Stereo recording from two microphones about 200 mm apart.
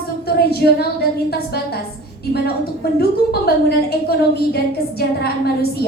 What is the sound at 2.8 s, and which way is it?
A woman's voice, 50° left (ahead or behind).